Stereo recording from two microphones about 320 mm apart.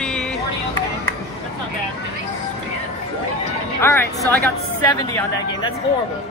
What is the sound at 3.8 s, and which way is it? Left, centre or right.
Vehicle, centre.